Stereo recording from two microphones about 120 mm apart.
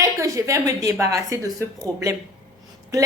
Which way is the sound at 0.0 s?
30° right (ahead or behind).